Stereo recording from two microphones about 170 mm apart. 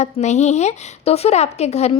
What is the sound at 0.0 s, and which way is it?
Speech, 40° left (ahead or behind).